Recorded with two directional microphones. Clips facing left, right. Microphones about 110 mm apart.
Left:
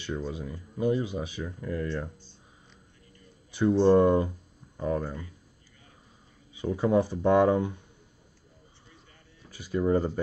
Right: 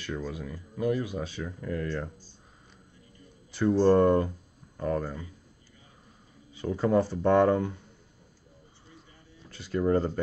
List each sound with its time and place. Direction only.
0.0 s speech: 20° left (ahead or behind); by 1.9 s centre (ahead or behind)
3.5 s speech: 15° left (ahead or behind)
6.5 s speech: 15° left (ahead or behind)
9.5 s speech: 10° left (ahead or behind)